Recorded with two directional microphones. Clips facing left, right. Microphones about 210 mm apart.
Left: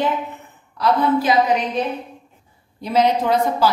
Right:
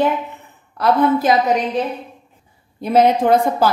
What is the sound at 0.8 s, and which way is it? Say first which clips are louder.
Speech: right 2 dB; 55° right (ahead or behind).